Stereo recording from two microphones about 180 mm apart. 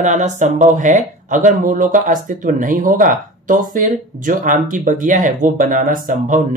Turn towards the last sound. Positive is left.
turn(degrees=-45)  # may be behind; listen again after turning